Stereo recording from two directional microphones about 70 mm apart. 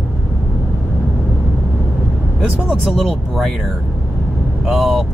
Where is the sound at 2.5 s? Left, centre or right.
Centre.